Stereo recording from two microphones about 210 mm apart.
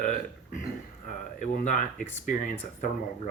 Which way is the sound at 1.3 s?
35° left (ahead or behind).